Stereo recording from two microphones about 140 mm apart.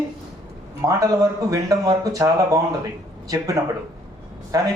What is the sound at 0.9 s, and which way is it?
Speech, 25° right (ahead or behind).